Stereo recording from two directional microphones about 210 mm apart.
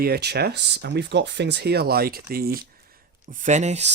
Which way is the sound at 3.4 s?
35° right (ahead or behind).